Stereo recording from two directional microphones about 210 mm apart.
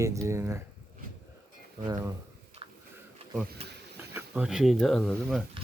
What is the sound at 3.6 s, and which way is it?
Speech, 30° right (ahead or behind).